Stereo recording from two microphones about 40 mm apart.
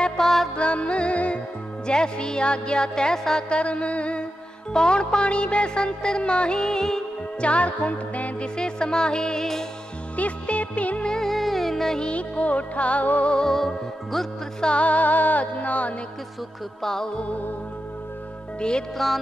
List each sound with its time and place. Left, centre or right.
0.2 s music: centre
0.6 s music: left
1.9 s music: left
4.7 s music: centre
7.3 s music: left
8.5 s music: left
10.1 s music: left
11.2 s music: centre
12.0 s music: left
13.3 s music: centre
13.6 s music: centre
14.6 s music: left
16.8 s music: centre
18.6 s music: centre